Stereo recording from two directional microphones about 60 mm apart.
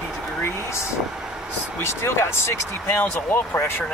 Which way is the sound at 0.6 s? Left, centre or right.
Left.